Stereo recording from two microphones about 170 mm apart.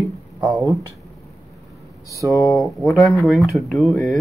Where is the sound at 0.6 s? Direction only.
20° right (ahead or behind).